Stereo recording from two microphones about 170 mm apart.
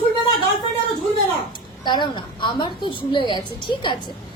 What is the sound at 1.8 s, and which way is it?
A woman's voice, 25° left (ahead or behind).